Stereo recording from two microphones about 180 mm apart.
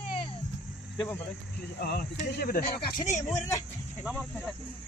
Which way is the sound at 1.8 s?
60° left (ahead or behind).